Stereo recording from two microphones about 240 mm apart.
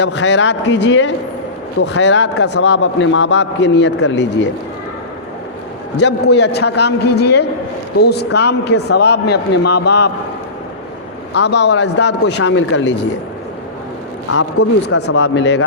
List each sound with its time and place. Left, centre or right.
0.0 s a man's voice: left
6.0 s a man's voice: left
11.3 s a man's voice: left
14.8 s speech: left
15.2 s a man's voice: left